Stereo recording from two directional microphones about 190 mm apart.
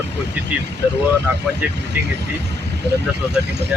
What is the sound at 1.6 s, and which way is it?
Speech, 10° right (ahead or behind).